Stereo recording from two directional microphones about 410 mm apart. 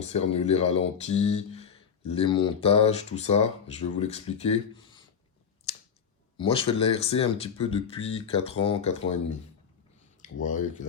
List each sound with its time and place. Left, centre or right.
0.0 s speech: centre
6.3 s speech: centre
10.2 s speech: centre